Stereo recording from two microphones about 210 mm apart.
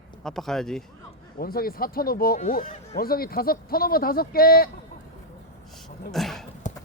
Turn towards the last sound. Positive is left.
turn(degrees=35)  # may be behind; listen again after turning